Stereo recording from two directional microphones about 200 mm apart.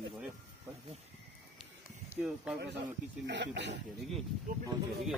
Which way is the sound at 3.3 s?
60° right (ahead or behind).